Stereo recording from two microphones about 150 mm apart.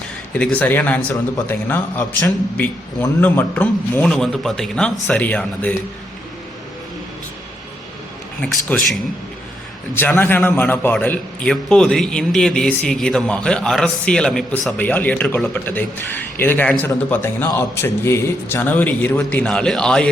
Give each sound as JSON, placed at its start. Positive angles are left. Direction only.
{"t": 0.3, "sound": "a man's voice", "side_deg": 10}
{"t": 8.7, "sound": "a man's voice", "side_deg": 10}
{"t": 9.9, "sound": "a man's voice", "side_deg": 15}